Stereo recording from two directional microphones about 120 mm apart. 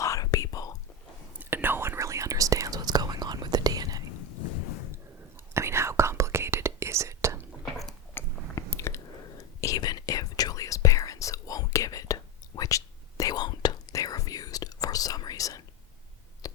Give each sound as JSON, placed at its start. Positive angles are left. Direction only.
{"t": 0.0, "sound": "whispering", "side_deg": 30}
{"t": 1.4, "sound": "whispering", "side_deg": -15}
{"t": 5.5, "sound": "whispering", "side_deg": -20}
{"t": 8.1, "sound": "chewing", "side_deg": 20}
{"t": 9.6, "sound": "whispering", "side_deg": 30}